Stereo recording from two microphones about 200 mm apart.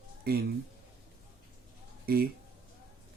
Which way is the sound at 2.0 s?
50° right (ahead or behind).